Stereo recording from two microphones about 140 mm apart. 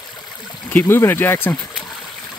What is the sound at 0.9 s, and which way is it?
Speech, 15° left (ahead or behind).